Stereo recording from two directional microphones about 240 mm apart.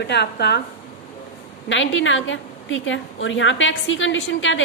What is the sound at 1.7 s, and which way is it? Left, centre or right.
A woman's voice, left.